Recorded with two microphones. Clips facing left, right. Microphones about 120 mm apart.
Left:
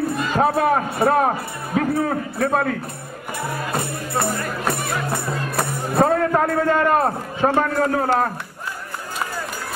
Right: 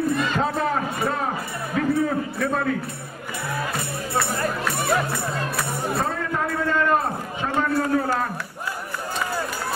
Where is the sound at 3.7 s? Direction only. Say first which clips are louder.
Left 2 dB; 45° left (ahead or behind).